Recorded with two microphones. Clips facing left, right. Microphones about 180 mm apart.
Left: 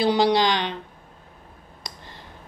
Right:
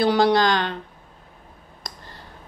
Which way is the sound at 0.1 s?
15° left (ahead or behind).